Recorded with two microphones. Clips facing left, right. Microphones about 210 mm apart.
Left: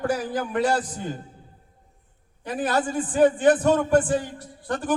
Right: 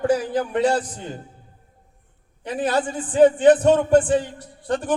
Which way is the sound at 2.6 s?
25° right (ahead or behind).